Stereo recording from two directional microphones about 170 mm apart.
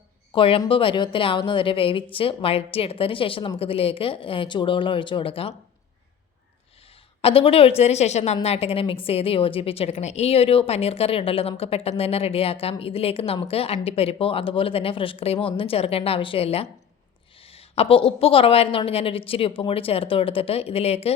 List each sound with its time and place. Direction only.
0.3 s a woman's voice: 30° left (ahead or behind)
7.2 s a woman's voice: 35° left (ahead or behind)